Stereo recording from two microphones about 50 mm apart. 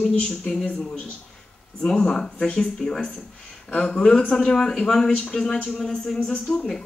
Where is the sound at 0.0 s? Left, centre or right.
Centre.